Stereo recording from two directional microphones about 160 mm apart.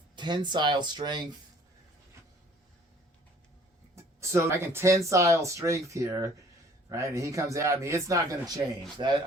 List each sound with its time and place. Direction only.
0.2 s speech: 30° right (ahead or behind)
3.9 s speech: 15° right (ahead or behind)